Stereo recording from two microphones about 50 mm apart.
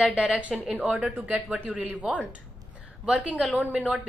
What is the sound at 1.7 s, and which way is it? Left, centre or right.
Speech, right.